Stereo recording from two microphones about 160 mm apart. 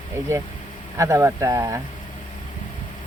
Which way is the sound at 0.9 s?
20° right (ahead or behind).